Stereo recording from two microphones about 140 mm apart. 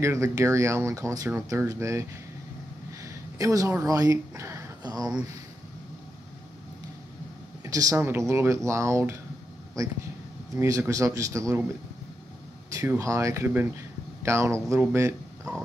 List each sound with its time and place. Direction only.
0.0 s speech: 20° right (ahead or behind)
7.6 s speech: 25° right (ahead or behind)
12.7 s speech: 20° right (ahead or behind)